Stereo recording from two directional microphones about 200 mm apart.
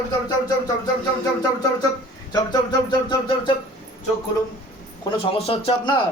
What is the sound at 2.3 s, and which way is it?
Speech, 20° left (ahead or behind).